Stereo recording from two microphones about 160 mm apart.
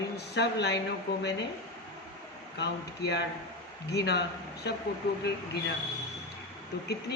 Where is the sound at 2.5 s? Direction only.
90° left.